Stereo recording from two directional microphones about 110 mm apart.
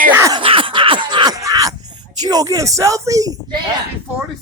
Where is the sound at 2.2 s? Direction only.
35° right (ahead or behind).